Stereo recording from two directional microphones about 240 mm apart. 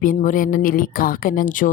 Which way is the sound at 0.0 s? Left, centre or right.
Left.